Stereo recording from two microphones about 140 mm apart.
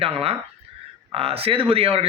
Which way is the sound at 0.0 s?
45° right (ahead or behind).